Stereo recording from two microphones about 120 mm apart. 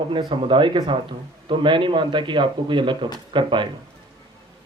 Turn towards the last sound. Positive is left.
turn(degrees=-45)  # may be behind; listen again after turning